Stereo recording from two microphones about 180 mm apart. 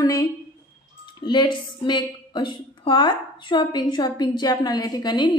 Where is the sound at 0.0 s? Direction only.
20° left (ahead or behind).